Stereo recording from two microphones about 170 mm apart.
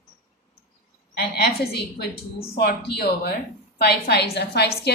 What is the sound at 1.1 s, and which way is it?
A woman's voice, 70° left (ahead or behind).